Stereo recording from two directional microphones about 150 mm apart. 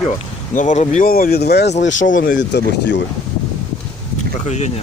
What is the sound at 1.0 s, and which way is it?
Speech, 65° left (ahead or behind).